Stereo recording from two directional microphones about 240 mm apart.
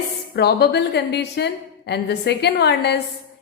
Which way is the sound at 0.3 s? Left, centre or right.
Left.